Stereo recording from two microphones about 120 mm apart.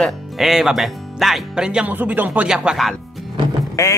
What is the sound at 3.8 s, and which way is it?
Speech, 25° left (ahead or behind).